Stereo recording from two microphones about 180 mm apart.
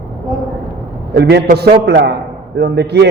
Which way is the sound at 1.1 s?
70° right (ahead or behind).